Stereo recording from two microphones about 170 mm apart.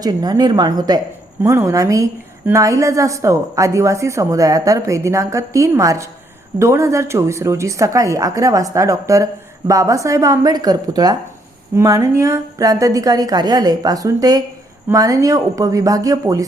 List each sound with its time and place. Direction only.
0.0 s a woman's voice: 25° right (ahead or behind)